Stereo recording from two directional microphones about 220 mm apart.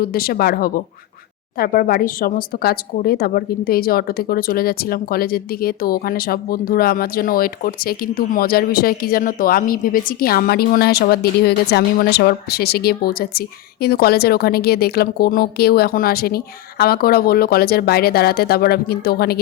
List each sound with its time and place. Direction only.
0.0 s speech: 45° left (ahead or behind)